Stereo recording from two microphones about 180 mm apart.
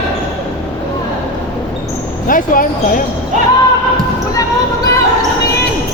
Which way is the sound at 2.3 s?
50° left (ahead or behind).